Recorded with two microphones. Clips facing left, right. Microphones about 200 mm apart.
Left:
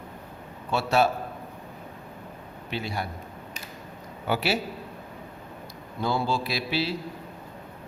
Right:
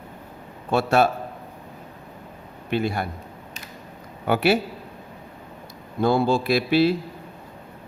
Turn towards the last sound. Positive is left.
turn(degrees=-55)  # may be behind; listen again after turning